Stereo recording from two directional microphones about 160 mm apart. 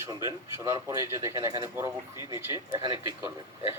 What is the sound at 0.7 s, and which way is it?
Speech, 20° right (ahead or behind).